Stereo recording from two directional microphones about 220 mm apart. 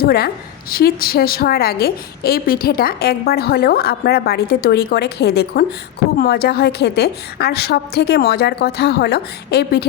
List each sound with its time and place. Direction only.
0.0 s a woman's voice: 45° left (ahead or behind)